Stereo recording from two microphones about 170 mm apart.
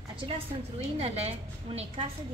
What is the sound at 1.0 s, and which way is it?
A woman's voice, 35° right (ahead or behind).